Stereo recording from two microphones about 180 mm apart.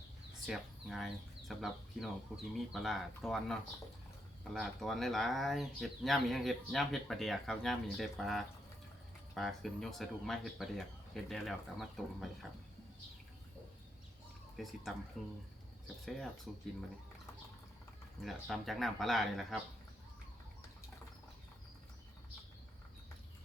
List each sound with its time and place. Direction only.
0.4 s speech: centre (ahead or behind)
14.5 s speech: centre (ahead or behind)
18.2 s speech: centre (ahead or behind)